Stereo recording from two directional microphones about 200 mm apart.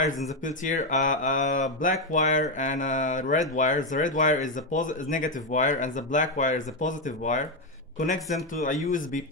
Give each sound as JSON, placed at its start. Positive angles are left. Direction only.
{"t": 0.4, "sound": "speech", "side_deg": 40}